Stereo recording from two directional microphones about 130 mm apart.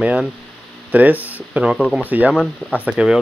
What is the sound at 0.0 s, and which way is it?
Speech, 10° right (ahead or behind).